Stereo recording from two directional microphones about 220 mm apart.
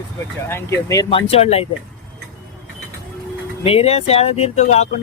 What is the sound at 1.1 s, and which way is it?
Speech, 30° left (ahead or behind).